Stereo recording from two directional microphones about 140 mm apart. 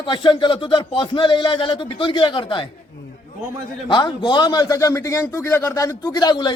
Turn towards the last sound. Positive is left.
turn(degrees=30)  # may be behind; listen again after turning